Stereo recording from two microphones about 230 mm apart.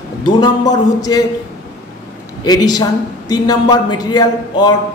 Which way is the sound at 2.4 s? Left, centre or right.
Centre.